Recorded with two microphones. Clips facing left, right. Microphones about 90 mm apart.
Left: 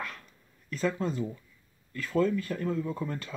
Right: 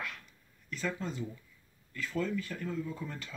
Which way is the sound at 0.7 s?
45° left (ahead or behind).